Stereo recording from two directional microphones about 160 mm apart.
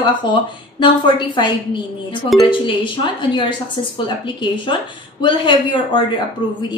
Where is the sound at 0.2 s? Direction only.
30° left (ahead or behind).